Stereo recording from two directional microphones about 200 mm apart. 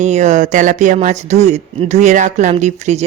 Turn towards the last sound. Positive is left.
turn(degrees=-35)  # may be behind; listen again after turning